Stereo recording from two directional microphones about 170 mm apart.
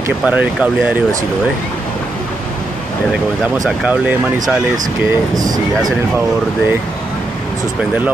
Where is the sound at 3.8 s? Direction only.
5° right (ahead or behind).